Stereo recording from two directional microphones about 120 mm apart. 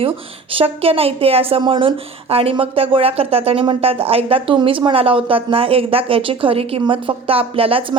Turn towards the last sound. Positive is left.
turn(degrees=-50)  # may be behind; listen again after turning